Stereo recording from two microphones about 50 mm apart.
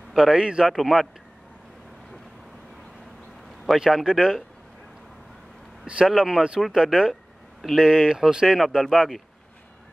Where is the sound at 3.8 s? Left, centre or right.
Centre.